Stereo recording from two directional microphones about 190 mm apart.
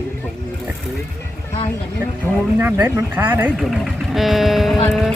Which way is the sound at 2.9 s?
10° right (ahead or behind).